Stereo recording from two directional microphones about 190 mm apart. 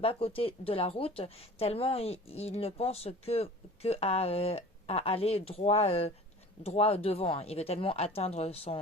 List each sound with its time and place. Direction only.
0.0 s speech: 30° left (ahead or behind)